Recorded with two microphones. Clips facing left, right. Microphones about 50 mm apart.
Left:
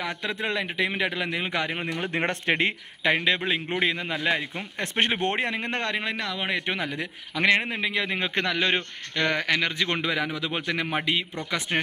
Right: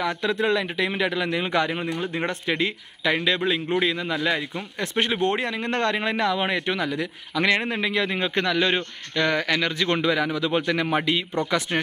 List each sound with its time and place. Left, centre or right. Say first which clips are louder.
0.0 s a man's voice: right 6 dB; centre
2.0 s speech: even; left
3.0 s a man's voice: right 1 dB; left
4.8 s speech: right 2 dB; left
5.7 s a man's voice: right 5 dB; centre
5.9 s a man's voice: right 6 dB; centre
6.6 s a man's voice: right 4 dB; centre